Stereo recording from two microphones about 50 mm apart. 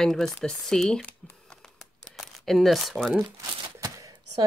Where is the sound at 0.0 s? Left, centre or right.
Centre.